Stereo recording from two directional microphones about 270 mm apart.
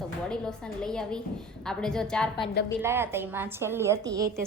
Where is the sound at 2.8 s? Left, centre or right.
Centre.